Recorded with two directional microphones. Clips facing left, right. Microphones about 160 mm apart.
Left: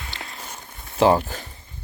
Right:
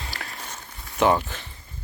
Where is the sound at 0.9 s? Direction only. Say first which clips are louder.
Left 3 dB; 30° left (ahead or behind).